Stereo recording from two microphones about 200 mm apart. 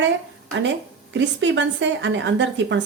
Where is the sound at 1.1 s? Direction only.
65° right (ahead or behind).